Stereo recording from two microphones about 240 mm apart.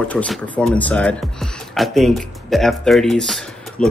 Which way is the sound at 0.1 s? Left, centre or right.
Centre.